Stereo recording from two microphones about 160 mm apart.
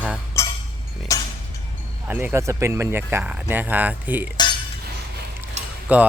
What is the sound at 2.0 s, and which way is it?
Speech, 10° right (ahead or behind).